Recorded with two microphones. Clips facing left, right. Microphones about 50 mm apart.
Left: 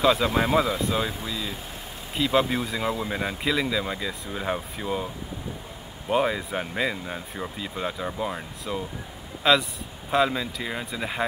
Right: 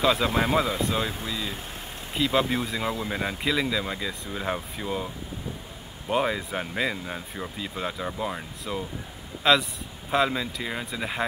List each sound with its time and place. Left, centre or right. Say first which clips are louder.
0.0 s speech: left 2 dB; centre